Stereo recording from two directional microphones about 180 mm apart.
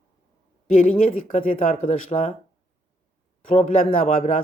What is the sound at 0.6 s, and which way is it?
Speech, 40° left (ahead or behind).